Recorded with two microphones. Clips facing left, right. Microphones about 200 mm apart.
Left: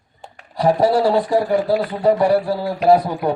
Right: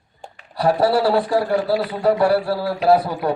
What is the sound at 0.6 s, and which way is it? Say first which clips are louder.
A man's voice: left 2 dB; 20° left (ahead or behind).